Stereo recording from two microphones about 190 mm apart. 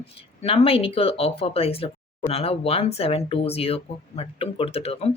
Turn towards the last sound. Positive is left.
turn(degrees=30)  # may be behind; listen again after turning